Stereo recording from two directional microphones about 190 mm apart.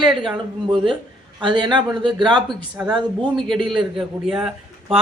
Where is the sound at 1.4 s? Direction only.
25° right (ahead or behind).